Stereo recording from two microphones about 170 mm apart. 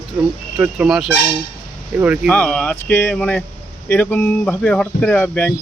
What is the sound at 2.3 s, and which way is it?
Speech, 5° left (ahead or behind).